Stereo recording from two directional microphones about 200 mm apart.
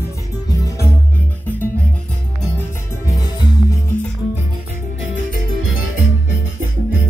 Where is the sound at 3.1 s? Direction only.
20° left (ahead or behind).